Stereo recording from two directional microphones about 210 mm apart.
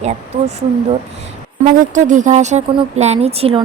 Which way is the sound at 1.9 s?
35° right (ahead or behind).